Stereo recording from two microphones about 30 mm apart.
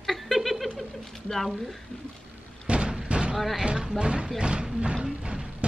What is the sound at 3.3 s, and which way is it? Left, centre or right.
Speech, centre.